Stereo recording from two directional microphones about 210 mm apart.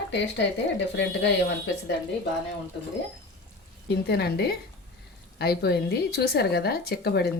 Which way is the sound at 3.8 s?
50° left (ahead or behind).